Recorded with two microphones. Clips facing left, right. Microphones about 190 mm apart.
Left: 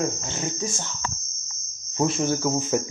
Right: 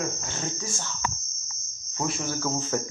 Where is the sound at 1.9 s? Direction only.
25° left (ahead or behind).